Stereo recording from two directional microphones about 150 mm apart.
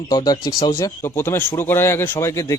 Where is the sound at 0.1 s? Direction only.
25° left (ahead or behind).